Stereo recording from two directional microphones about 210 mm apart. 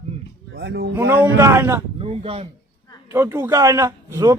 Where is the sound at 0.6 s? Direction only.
55° right (ahead or behind).